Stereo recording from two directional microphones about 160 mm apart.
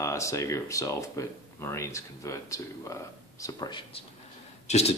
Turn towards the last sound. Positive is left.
turn(degrees=40)  # may be behind; listen again after turning